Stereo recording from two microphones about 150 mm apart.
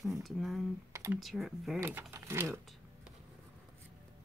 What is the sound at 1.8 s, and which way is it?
Speech, 15° right (ahead or behind).